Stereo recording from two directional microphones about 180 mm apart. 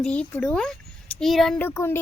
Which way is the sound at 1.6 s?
15° left (ahead or behind).